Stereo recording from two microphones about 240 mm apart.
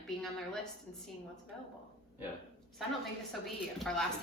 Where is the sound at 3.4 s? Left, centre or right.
Centre.